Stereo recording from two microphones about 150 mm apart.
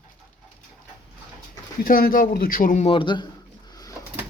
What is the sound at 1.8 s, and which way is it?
Speech, 80° left.